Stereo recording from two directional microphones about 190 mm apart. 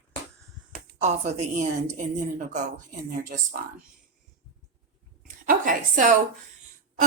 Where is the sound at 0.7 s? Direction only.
35° right (ahead or behind).